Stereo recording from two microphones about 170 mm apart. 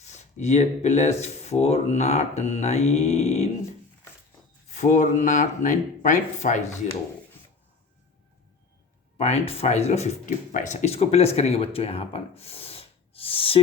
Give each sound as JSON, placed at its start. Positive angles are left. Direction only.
{"t": 0.0, "sound": "speech", "side_deg": 40}
{"t": 4.7, "sound": "speech", "side_deg": 45}
{"t": 9.1, "sound": "speech", "side_deg": 40}